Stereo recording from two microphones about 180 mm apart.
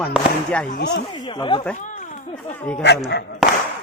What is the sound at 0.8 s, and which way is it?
Speech, 70° left (ahead or behind).